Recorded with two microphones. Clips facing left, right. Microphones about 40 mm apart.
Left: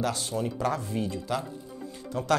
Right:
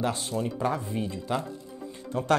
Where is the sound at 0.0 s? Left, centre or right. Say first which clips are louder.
Even; right.